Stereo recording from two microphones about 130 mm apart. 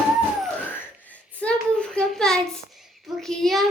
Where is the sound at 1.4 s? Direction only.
5° left (ahead or behind).